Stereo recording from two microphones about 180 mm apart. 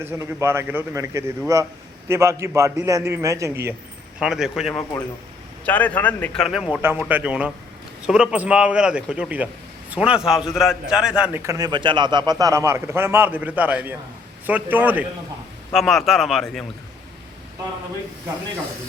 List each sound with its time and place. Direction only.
0.0 s a man's voice: 15° right (ahead or behind)
4.2 s a man's voice: 5° right (ahead or behind)
5.6 s a man's voice: 10° left (ahead or behind)
11.2 s a man's voice: 15° right (ahead or behind)
15.7 s a man's voice: centre (ahead or behind)